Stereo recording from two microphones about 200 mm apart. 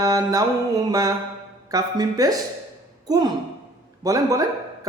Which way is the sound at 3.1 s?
20° right (ahead or behind).